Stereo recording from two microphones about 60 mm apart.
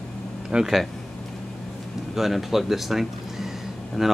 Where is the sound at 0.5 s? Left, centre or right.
Centre.